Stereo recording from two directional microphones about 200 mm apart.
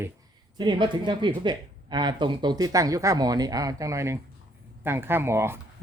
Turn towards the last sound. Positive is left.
turn(degrees=-10)  # may be behind; listen again after turning